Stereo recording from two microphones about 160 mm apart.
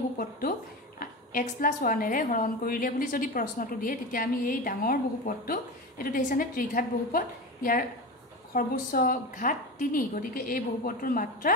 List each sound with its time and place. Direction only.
0.9 s a woman's voice: 60° left (ahead or behind)